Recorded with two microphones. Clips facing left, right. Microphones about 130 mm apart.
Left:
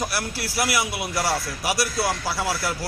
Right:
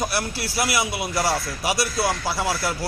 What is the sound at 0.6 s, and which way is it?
A man's voice, 15° right (ahead or behind).